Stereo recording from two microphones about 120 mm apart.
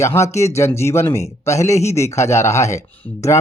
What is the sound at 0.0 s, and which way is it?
Speech, 25° left (ahead or behind).